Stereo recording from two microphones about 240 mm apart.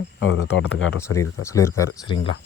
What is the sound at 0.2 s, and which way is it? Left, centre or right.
Speech, left.